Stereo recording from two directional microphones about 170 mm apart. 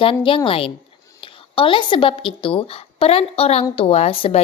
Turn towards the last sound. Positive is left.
turn(degrees=35)  # may be behind; listen again after turning